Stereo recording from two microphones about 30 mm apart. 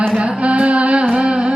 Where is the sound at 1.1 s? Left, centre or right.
Right.